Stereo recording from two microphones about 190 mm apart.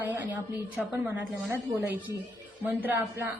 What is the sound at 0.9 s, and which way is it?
A woman's voice, 10° right (ahead or behind).